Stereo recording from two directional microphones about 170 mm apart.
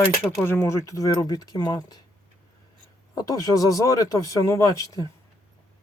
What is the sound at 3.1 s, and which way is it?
Speech, 20° left (ahead or behind).